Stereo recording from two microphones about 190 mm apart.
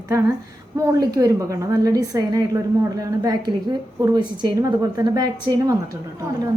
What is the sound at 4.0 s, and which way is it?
A woman's voice, 20° right (ahead or behind).